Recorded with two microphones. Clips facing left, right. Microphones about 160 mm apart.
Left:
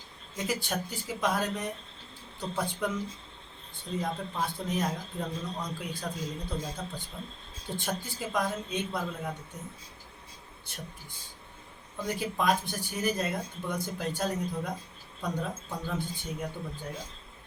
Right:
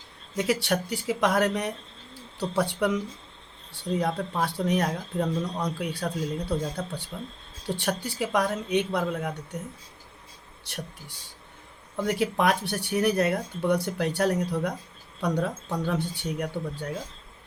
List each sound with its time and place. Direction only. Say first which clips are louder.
0.3 s speech: right 7 dB; 75° right (ahead or behind)
4.0 s speech: right 4 dB; 75° right (ahead or behind)
10.7 s speech: right 9 dB; 75° right (ahead or behind)
12.0 s speech: right 4 dB; 75° right (ahead or behind)